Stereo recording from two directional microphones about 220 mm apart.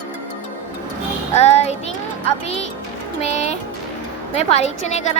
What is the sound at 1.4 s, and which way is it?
Child singing, 30° left (ahead or behind).